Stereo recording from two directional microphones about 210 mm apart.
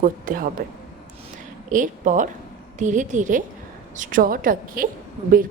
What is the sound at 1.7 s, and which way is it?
A woman's voice, 40° right (ahead or behind).